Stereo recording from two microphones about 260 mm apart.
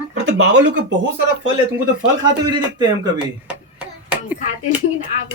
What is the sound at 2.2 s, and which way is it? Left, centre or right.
A woman's voice, centre.